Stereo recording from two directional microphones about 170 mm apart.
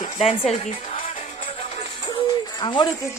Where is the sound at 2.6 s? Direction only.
30° left (ahead or behind).